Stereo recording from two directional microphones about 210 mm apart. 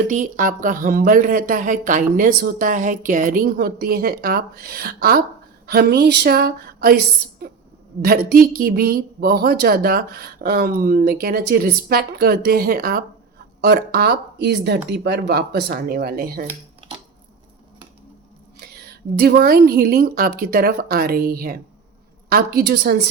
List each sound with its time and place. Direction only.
0.1 s speech: 40° right (ahead or behind)
19.2 s speech: 50° right (ahead or behind)